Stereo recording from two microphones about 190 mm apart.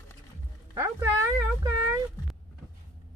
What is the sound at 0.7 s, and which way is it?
Speech, 15° right (ahead or behind).